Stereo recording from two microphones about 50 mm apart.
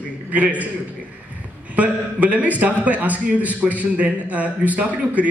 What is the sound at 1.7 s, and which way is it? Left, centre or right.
A man's voice, right.